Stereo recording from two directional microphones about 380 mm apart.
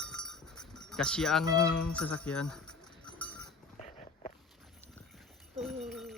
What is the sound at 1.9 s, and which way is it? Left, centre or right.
Jingle bell, centre.